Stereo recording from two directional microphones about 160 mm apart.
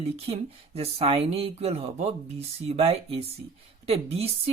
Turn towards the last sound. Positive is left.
turn(degrees=-40)  # may be behind; listen again after turning